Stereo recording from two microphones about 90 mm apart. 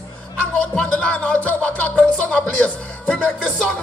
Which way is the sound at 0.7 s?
15° left (ahead or behind).